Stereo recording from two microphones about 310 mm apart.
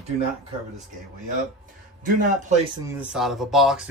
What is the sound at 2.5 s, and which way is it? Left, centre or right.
Speech, right.